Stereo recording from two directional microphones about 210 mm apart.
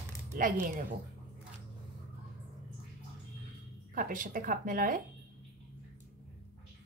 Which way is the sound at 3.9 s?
40° right (ahead or behind).